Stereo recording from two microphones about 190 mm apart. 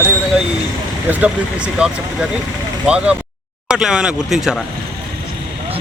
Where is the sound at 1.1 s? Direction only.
5° right (ahead or behind).